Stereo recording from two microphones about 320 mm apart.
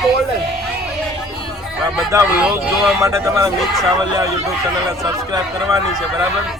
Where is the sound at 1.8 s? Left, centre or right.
Centre.